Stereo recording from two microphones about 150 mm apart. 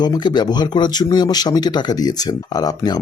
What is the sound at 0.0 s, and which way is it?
Speech, 30° left (ahead or behind).